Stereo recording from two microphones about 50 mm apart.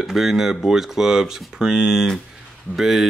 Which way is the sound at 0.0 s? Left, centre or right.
Centre.